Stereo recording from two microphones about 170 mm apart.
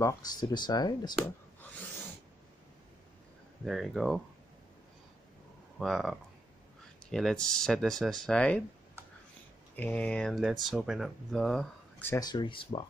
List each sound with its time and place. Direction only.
0.0 s speech: 25° left (ahead or behind)
3.6 s speech: centre (ahead or behind)
5.8 s speech: centre (ahead or behind)
9.8 s speech: 10° left (ahead or behind)
12.1 s speech: 25° left (ahead or behind)